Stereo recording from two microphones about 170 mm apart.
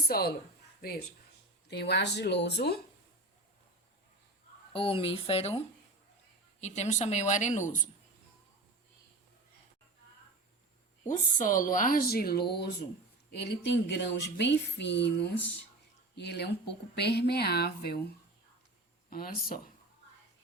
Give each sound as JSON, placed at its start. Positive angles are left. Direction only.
{"t": 0.8, "sound": "speech", "side_deg": 65}
{"t": 1.6, "sound": "speech", "side_deg": 80}
{"t": 4.7, "sound": "speech", "side_deg": 30}
{"t": 11.1, "sound": "speech", "side_deg": 50}
{"t": 13.3, "sound": "speech", "side_deg": 85}
{"t": 19.1, "sound": "speech", "side_deg": 60}